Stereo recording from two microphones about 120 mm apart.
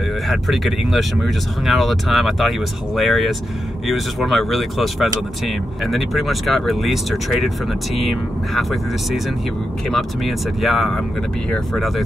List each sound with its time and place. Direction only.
0.3 s speech: centre (ahead or behind)